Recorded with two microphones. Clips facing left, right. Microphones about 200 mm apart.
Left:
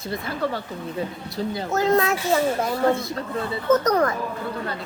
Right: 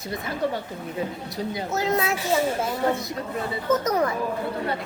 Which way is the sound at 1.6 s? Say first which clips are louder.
Left 5 dB; centre (ahead or behind).